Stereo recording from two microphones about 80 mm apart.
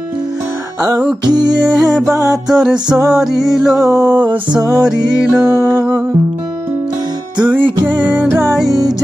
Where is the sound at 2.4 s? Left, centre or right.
Centre.